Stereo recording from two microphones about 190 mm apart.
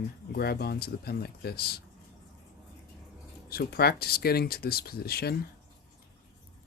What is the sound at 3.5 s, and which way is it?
Speech, 55° left (ahead or behind).